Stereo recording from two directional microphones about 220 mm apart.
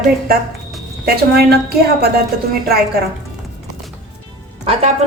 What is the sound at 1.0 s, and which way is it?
Speech, 45° right (ahead or behind).